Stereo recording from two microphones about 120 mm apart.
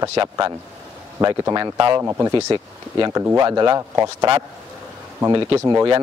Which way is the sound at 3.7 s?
25° right (ahead or behind).